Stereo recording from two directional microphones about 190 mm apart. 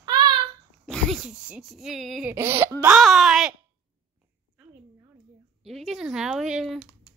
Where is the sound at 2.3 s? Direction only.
15° right (ahead or behind).